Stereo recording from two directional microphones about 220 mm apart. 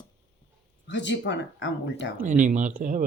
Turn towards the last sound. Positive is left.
turn(degrees=-35)  # may be behind; listen again after turning